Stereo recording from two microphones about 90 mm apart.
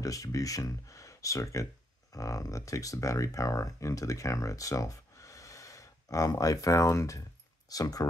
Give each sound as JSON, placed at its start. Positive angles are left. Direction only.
{"t": 0.0, "sound": "speech", "side_deg": 40}